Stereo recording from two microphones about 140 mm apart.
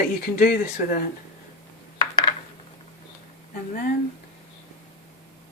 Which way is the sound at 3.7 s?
75° left (ahead or behind).